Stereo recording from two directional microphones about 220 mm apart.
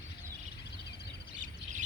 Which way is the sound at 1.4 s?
35° right (ahead or behind).